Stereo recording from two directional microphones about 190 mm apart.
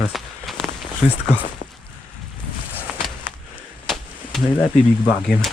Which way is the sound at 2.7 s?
5° left (ahead or behind).